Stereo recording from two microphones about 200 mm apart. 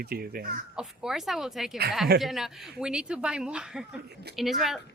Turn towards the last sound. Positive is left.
turn(degrees=0)  # may be behind; listen again after turning